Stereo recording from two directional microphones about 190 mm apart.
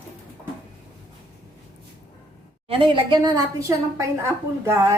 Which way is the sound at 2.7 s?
25° right (ahead or behind).